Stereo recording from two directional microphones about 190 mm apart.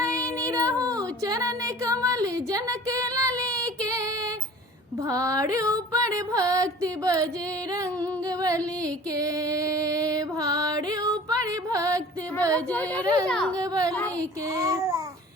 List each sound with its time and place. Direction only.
0.0 s a sound: 15° right (ahead or behind)
5.0 s music: 15° right (ahead or behind)
8.3 s music: 20° right (ahead or behind)
12.5 s speech: 5° left (ahead or behind)
13.6 s speech: 20° right (ahead or behind)
14.5 s music: 15° right (ahead or behind)